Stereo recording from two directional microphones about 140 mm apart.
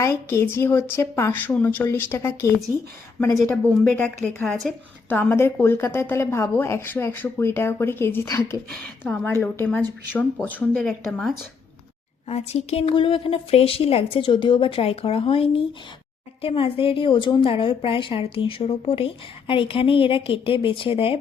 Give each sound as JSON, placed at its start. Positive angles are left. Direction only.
{"t": 0.0, "sound": "a woman's voice", "side_deg": 20}
{"t": 4.4, "sound": "speech", "side_deg": 5}
{"t": 5.0, "sound": "a woman's voice", "side_deg": 15}
{"t": 10.8, "sound": "speech", "side_deg": 0}
{"t": 12.3, "sound": "a woman's voice", "side_deg": 50}